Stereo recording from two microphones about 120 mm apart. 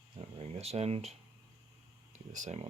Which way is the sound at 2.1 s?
85° right.